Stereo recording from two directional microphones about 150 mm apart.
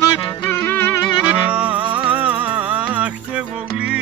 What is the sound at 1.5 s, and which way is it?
Music, 10° right (ahead or behind).